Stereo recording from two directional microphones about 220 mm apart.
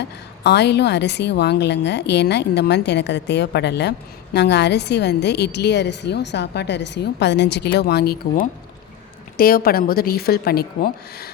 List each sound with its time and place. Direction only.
0.4 s a woman's voice: 50° left (ahead or behind)